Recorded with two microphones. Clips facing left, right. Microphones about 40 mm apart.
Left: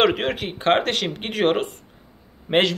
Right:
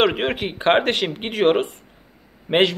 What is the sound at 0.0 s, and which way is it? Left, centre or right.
A man's voice, centre.